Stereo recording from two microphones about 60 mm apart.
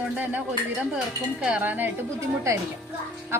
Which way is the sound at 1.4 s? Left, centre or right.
Centre.